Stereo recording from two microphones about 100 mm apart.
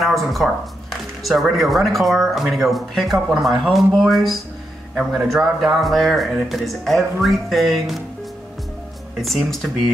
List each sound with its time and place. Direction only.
0.0 s speech: centre (ahead or behind)
9.2 s speech: centre (ahead or behind)